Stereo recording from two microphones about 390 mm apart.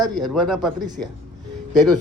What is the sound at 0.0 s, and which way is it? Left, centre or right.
A man's voice, centre.